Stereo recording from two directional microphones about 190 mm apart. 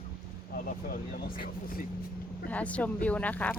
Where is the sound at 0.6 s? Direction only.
50° left (ahead or behind).